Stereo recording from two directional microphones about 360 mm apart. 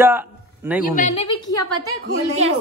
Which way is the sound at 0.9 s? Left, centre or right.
Centre.